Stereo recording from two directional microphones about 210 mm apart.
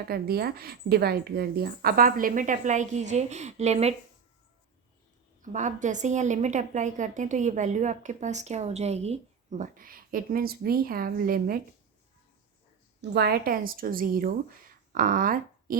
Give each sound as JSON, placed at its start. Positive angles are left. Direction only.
{"t": 0.1, "sound": "a woman's voice", "side_deg": -50}
{"t": 5.4, "sound": "a woman's voice", "side_deg": -35}
{"t": 13.0, "sound": "a woman's voice", "side_deg": -50}